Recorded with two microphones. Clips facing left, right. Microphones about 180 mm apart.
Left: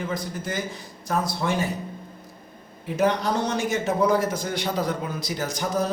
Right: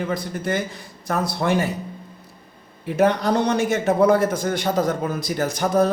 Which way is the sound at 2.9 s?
60° right (ahead or behind).